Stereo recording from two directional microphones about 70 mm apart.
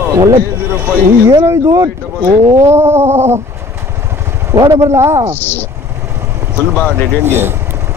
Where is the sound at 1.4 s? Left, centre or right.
Right.